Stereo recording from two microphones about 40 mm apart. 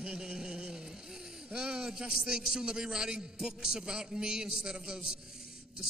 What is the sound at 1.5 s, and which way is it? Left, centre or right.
A man's voice, centre.